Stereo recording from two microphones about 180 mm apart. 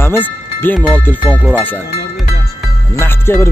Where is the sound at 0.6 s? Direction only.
10° left (ahead or behind).